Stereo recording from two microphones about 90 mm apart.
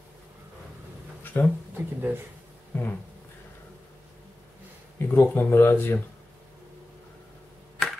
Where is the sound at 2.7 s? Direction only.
20° left (ahead or behind).